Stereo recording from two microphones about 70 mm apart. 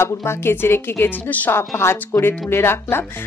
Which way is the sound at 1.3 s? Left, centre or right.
Left.